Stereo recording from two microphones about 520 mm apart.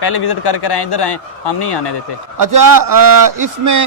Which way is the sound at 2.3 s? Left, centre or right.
Right.